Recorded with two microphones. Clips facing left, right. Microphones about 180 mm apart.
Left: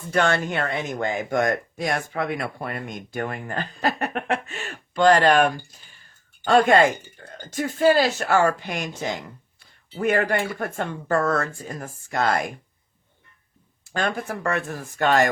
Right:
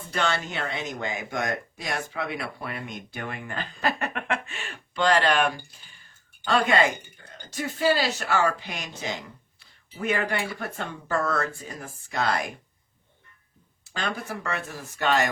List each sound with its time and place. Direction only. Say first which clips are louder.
0.1 s speech: left 6 dB; 50° left (ahead or behind)
13.8 s speech: left 5 dB; 50° left (ahead or behind)